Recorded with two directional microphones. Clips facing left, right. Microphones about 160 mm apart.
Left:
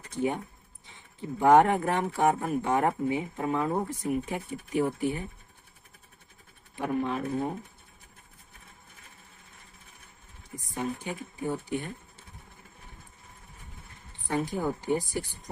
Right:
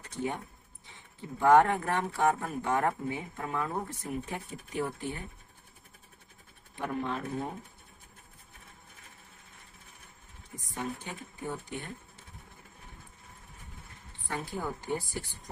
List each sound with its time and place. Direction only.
0.1 s speech: 10° left (ahead or behind)
1.4 s speech: 20° left (ahead or behind)
3.9 s speech: 10° left (ahead or behind)
6.7 s speech: 10° left (ahead or behind)
10.5 s speech: 10° left (ahead or behind)
14.2 s speech: 15° left (ahead or behind)